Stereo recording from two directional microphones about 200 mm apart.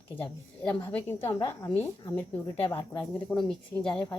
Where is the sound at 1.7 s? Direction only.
10° left (ahead or behind).